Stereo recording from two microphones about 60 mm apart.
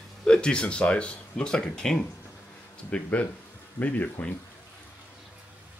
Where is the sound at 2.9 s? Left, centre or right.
Left.